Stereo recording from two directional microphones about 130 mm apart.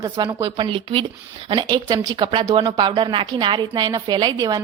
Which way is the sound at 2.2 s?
40° right (ahead or behind).